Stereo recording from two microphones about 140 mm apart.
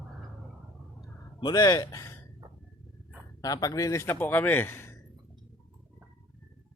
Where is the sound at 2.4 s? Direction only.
30° right (ahead or behind).